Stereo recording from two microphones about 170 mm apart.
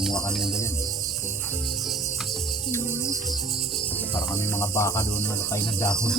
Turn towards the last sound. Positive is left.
turn(degrees=10)  # may be behind; listen again after turning